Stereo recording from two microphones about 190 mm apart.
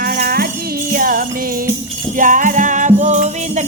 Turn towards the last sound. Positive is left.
turn(degrees=-35)  # may be behind; listen again after turning